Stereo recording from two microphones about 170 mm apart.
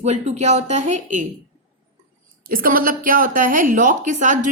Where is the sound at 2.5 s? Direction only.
55° right (ahead or behind).